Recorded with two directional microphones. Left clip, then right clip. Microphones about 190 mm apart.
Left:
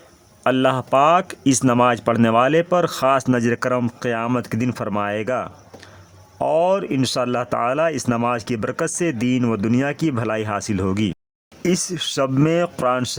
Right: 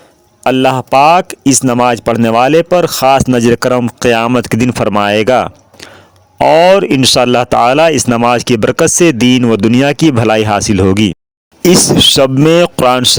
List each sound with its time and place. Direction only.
0.4 s speech: 35° right (ahead or behind)